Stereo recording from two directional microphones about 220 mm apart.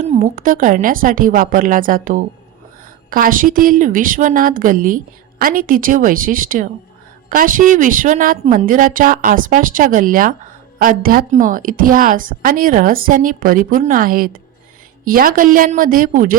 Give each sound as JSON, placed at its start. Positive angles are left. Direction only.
{"t": 0.0, "sound": "a woman's voice", "side_deg": -30}